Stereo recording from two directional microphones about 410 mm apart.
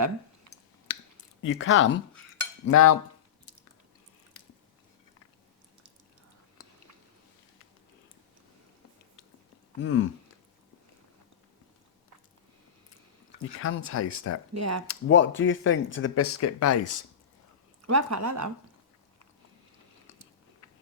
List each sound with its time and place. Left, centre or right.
0.9 s a sound: left
2.6 s cutlery: left
9.8 s cutlery: left
13.6 s speech: left
14.5 s speech: right
14.8 s speech: left
17.8 s speech: right